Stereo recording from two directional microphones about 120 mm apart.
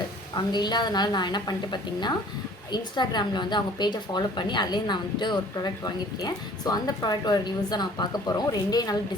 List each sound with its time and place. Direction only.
0.3 s a woman's voice: 35° left (ahead or behind)